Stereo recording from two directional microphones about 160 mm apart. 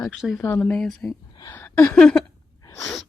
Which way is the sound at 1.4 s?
15° left (ahead or behind).